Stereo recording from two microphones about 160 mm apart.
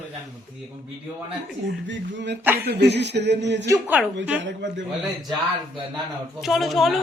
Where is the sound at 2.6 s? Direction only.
90° right.